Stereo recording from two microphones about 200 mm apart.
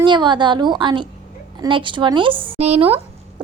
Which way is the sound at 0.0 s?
25° right (ahead or behind).